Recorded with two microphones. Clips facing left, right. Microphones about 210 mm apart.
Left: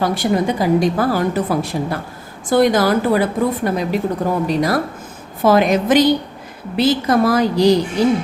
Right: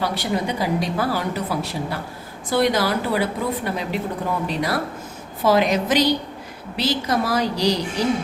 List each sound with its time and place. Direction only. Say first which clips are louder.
0.0 s a woman's voice: left 6 dB; 45° left (ahead or behind)